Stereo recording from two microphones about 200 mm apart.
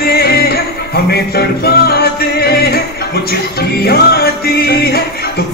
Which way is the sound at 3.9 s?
50° left (ahead or behind).